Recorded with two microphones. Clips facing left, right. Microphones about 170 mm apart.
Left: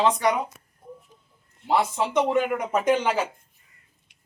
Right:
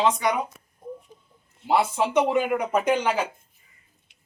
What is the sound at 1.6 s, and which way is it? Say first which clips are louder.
Speech: right 1 dB; 10° right (ahead or behind).